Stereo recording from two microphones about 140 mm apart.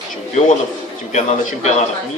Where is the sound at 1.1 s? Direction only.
60° left (ahead or behind).